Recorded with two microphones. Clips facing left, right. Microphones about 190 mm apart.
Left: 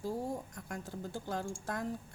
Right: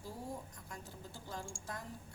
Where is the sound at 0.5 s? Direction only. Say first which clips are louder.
Left 8 dB; 55° left (ahead or behind).